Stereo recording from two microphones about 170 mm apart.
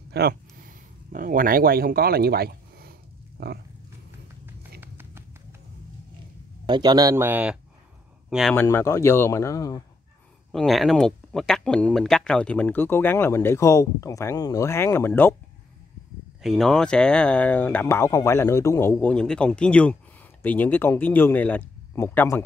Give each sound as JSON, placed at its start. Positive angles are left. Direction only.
{"t": 0.1, "sound": "speech", "side_deg": -65}
{"t": 3.4, "sound": "roaring cats", "side_deg": -70}
{"t": 4.7, "sound": "tap", "side_deg": -15}
{"t": 6.7, "sound": "speech", "side_deg": -25}
{"t": 8.3, "sound": "speech", "side_deg": 0}
{"t": 8.5, "sound": "speech", "side_deg": 15}
{"t": 10.5, "sound": "speech", "side_deg": 0}
{"t": 16.4, "sound": "speech", "side_deg": 0}